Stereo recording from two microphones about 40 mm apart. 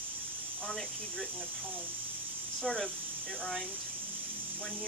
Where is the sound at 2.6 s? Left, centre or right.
Centre.